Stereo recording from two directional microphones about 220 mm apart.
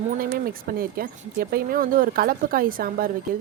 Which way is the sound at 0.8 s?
40° right (ahead or behind).